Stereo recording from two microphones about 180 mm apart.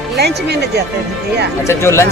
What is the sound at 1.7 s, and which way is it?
Speech, 15° left (ahead or behind).